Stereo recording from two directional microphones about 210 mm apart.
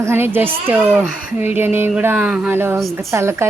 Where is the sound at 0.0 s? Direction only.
10° right (ahead or behind).